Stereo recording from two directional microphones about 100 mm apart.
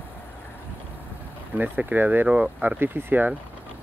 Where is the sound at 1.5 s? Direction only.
20° right (ahead or behind).